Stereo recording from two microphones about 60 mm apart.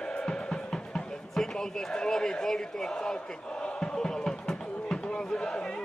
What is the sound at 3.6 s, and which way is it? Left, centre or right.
Music, centre.